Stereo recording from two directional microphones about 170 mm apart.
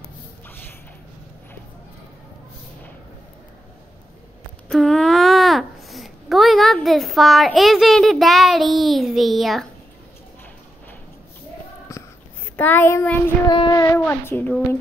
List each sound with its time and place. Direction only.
4.6 s babbling: centre (ahead or behind)
11.9 s sniff: 20° left (ahead or behind)
12.5 s a child's voice: 10° left (ahead or behind)
13.5 s a child's voice: 25° left (ahead or behind)